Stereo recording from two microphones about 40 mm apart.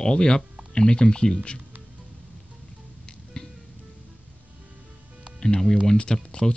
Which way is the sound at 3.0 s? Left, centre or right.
Centre.